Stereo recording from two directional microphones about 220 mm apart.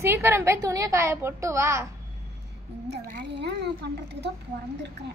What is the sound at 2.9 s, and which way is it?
Speech, 50° right (ahead or behind).